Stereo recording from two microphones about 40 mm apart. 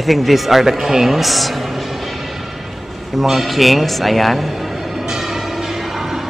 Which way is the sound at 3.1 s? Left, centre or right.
Centre.